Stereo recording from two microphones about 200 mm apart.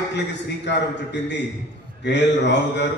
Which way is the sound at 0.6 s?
60° left (ahead or behind).